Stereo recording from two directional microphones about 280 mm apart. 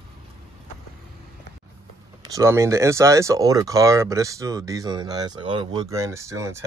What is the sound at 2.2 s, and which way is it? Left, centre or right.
Speech, centre.